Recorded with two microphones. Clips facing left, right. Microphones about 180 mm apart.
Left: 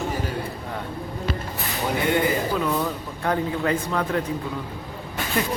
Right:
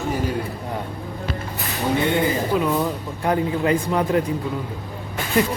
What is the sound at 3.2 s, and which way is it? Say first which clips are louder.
Speech: right 3 dB; 15° right (ahead or behind).